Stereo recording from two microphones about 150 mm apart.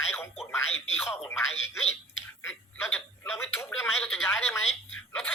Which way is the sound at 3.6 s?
15° left (ahead or behind).